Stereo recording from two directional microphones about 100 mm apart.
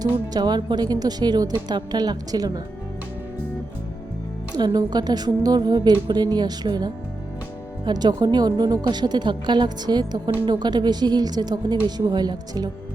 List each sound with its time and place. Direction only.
0.0 s a woman's voice: 40° right (ahead or behind)
4.5 s a woman's voice: 45° right (ahead or behind)